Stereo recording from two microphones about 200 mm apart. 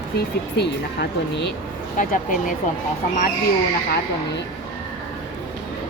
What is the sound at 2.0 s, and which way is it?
Speech, 40° left (ahead or behind).